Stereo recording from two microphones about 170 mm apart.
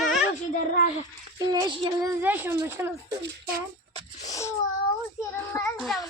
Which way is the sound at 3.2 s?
60° right (ahead or behind).